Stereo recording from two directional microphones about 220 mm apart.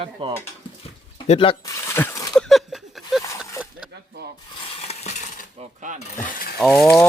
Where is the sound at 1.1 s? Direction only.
25° left (ahead or behind).